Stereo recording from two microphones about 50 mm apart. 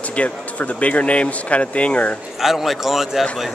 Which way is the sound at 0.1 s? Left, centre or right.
Left.